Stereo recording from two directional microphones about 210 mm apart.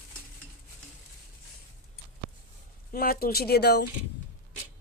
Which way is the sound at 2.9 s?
45° left (ahead or behind).